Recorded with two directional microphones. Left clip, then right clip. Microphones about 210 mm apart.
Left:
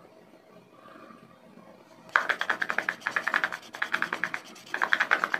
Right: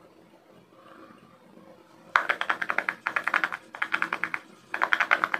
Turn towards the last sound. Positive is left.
turn(degrees=-15)  # may be behind; listen again after turning